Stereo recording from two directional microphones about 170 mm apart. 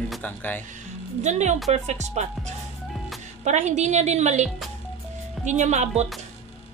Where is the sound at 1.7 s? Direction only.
40° right (ahead or behind).